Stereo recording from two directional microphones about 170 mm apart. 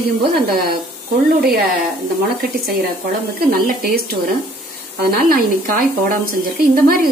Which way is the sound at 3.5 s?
60° right (ahead or behind).